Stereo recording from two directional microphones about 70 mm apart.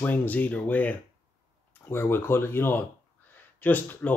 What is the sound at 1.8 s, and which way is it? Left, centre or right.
Speech, left.